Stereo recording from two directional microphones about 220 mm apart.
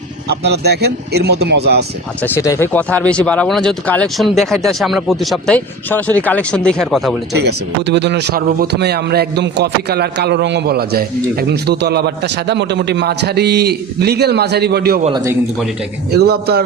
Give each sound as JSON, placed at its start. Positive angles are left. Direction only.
{"t": 0.3, "sound": "speech", "side_deg": -50}
{"t": 2.2, "sound": "speech", "side_deg": 10}
{"t": 7.3, "sound": "speech", "side_deg": -50}
{"t": 16.1, "sound": "speech", "side_deg": -45}